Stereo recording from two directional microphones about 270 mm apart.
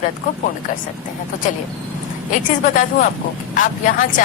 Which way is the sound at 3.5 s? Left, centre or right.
Left.